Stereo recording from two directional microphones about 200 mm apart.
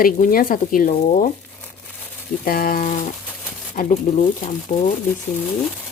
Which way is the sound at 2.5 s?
45° left (ahead or behind).